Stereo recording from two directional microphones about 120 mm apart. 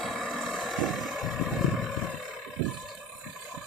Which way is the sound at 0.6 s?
Centre (ahead or behind).